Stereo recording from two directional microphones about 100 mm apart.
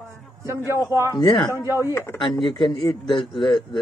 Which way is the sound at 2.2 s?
50° left (ahead or behind).